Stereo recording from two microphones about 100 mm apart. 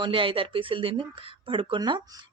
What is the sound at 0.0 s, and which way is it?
Speech, 60° right (ahead or behind).